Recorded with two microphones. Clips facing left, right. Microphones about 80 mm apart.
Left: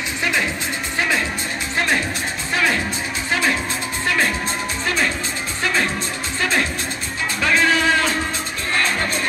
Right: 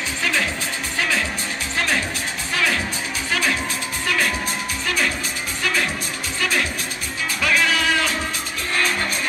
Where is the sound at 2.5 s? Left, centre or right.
Left.